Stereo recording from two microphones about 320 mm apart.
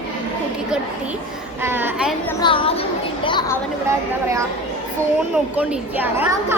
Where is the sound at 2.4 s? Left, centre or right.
Centre.